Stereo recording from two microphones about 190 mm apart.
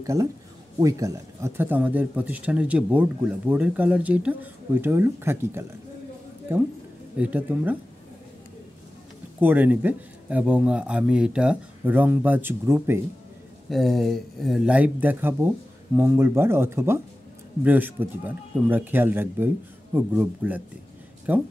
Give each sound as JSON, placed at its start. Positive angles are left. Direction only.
{"t": 0.0, "sound": "speech", "side_deg": -15}
{"t": 9.4, "sound": "speech", "side_deg": -10}
{"t": 13.7, "sound": "speech", "side_deg": 0}